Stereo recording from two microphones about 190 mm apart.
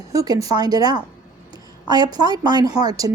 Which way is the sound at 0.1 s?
20° right (ahead or behind).